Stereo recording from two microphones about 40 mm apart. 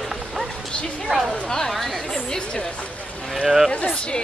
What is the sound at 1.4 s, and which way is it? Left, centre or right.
Speech, centre.